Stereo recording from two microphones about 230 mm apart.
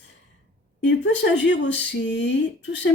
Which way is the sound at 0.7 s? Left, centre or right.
Left.